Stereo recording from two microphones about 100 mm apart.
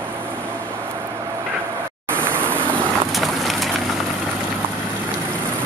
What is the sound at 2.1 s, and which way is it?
Vehicle, 20° right (ahead or behind).